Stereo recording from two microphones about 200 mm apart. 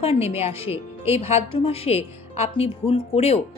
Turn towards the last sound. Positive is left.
turn(degrees=30)  # may be behind; listen again after turning